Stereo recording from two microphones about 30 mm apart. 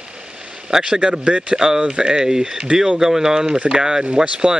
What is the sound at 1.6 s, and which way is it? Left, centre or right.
Speech, right.